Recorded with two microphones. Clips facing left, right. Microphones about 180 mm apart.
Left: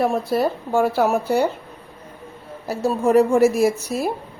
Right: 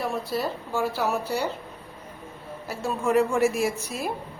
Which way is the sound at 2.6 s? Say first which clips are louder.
Left 7 dB; 40° left (ahead or behind).